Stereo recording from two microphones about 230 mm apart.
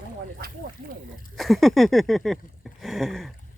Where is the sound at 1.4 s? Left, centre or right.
Centre.